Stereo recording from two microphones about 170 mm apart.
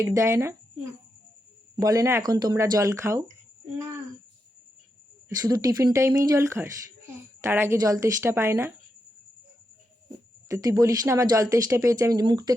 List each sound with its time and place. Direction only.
0.0 s a woman's voice: 20° right (ahead or behind)
1.7 s speech: 20° right (ahead or behind)
5.5 s a woman's voice: 20° right (ahead or behind)
10.5 s speech: 20° right (ahead or behind)